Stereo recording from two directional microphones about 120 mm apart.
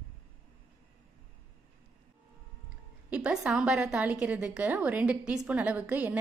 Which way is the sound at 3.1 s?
5° right (ahead or behind).